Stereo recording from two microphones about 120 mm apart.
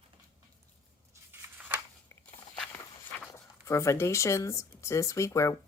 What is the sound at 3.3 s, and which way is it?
Speech, 25° left (ahead or behind).